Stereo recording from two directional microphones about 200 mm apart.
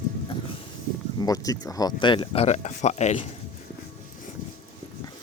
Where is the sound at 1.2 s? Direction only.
20° left (ahead or behind); by 3.2 s 35° left (ahead or behind).